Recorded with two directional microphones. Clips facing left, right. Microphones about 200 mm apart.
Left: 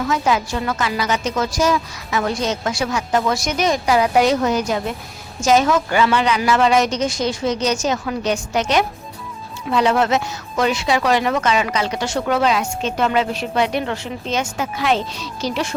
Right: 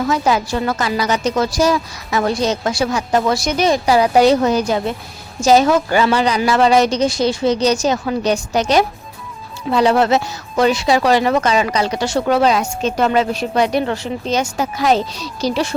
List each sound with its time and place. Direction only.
0.1 s a woman's voice: 35° right (ahead or behind)